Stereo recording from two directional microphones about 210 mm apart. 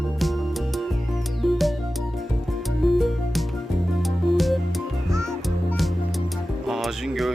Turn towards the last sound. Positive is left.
turn(degrees=0)  # may be behind; listen again after turning